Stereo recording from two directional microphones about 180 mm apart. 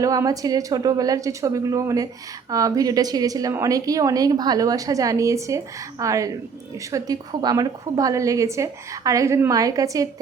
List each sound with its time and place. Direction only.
0.0 s a woman's voice: 20° right (ahead or behind)